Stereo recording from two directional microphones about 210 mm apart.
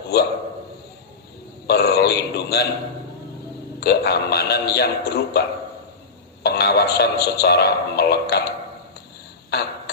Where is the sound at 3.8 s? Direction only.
50° left (ahead or behind).